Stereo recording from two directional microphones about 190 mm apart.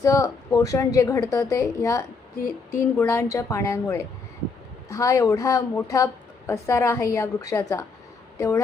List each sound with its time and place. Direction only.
0.0 s a woman's voice: 15° left (ahead or behind)